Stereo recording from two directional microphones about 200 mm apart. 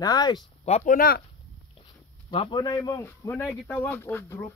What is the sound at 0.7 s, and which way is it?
Speech, 40° left (ahead or behind).